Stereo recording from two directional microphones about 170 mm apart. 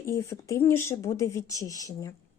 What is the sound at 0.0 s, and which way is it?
Speech, 15° left (ahead or behind).